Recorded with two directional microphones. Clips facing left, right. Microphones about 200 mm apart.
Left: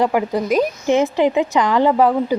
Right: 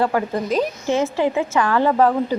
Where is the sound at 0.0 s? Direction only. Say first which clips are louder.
Left 2 dB; 15° left (ahead or behind).